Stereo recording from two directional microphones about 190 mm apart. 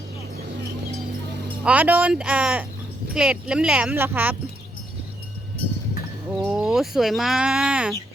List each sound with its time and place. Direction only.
1.6 s speech: 10° right (ahead or behind)
6.4 s speech: 5° right (ahead or behind)